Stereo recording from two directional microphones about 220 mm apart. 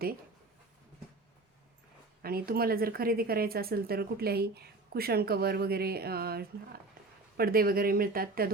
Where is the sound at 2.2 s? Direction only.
45° right (ahead or behind).